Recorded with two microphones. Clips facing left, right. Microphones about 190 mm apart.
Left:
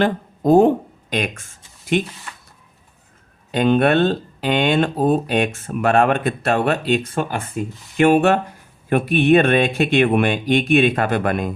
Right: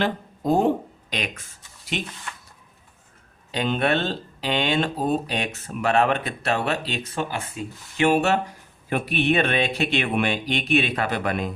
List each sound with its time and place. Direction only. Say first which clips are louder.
0.0 s speech: left 6 dB; 50° left (ahead or behind)
3.5 s speech: left 7 dB; 55° left (ahead or behind)